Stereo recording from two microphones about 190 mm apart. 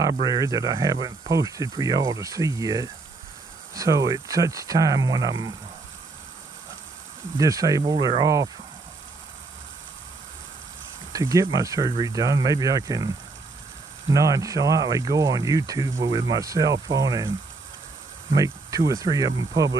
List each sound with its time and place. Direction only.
0.0 s speech: 20° right (ahead or behind)
7.3 s speech: 20° right (ahead or behind)
11.1 s speech: 20° right (ahead or behind)
14.1 s speech: 15° right (ahead or behind)
18.3 s speech: 20° right (ahead or behind)